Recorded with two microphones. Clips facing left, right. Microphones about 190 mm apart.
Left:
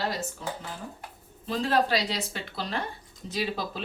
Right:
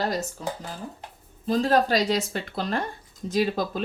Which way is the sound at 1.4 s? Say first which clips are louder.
Right 4 dB; 40° right (ahead or behind).